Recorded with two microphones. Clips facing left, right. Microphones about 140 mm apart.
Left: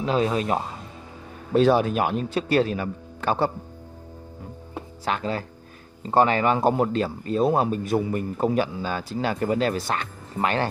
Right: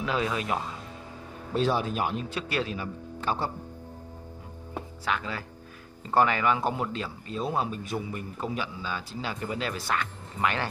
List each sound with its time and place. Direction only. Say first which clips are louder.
0.0 s speech: left 6 dB; 30° left (ahead or behind)
1.5 s speech: left 8 dB; 65° left (ahead or behind)
2.3 s a man's voice: left 9 dB; 40° left (ahead or behind)
2.8 s speech: left 5 dB; 65° left (ahead or behind)
5.0 s speech: left 6 dB; 35° left (ahead or behind)
6.7 s a man's voice: left 9 dB; 45° left (ahead or behind)
9.8 s speech: left 2 dB; 30° left (ahead or behind)